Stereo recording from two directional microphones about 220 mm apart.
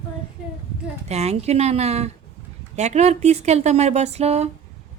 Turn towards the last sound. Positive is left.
turn(degrees=-30)  # may be behind; listen again after turning